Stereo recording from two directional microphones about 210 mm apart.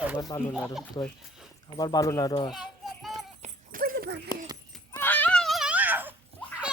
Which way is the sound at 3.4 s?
40° right (ahead or behind).